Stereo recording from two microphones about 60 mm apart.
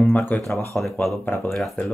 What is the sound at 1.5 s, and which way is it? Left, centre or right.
Speech, centre.